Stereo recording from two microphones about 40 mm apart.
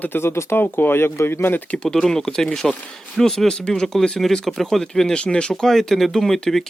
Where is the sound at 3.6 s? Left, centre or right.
Left.